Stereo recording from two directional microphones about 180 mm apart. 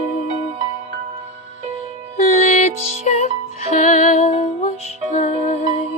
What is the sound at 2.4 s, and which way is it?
Music, 45° left (ahead or behind).